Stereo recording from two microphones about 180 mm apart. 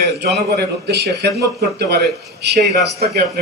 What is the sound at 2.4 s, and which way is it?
Speech, 65° right (ahead or behind).